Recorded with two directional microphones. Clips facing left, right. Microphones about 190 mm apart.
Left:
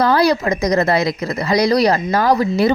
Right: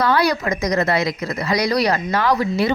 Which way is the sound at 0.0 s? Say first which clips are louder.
Left 4 dB; 35° left (ahead or behind).